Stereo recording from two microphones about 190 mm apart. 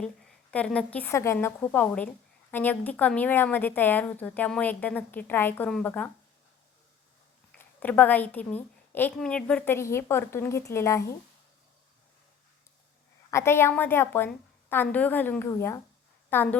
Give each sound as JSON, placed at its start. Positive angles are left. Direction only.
{"t": 0.5, "sound": "a woman's voice", "side_deg": 5}
{"t": 7.6, "sound": "a woman's voice", "side_deg": 10}
{"t": 13.3, "sound": "a woman's voice", "side_deg": 15}